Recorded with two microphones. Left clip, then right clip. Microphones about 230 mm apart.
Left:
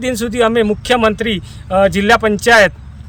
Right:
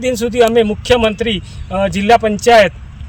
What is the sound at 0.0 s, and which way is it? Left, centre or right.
Speech, centre.